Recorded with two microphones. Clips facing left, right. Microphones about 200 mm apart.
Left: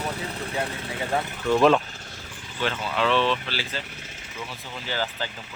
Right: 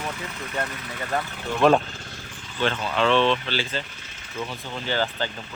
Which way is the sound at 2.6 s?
5° left (ahead or behind).